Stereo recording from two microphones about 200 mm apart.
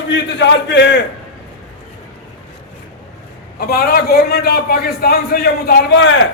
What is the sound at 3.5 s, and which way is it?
A man's voice, 50° left (ahead or behind).